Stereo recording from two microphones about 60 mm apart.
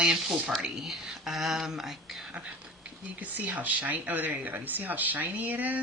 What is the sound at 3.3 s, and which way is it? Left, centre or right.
Speech, right.